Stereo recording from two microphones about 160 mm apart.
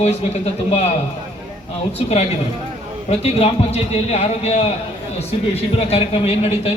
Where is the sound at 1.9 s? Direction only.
40° left (ahead or behind).